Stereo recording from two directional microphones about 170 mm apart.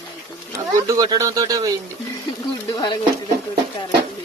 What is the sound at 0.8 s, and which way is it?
Speech, 20° right (ahead or behind).